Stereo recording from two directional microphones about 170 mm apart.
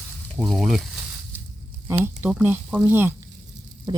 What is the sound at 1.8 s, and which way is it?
Speech, 15° right (ahead or behind).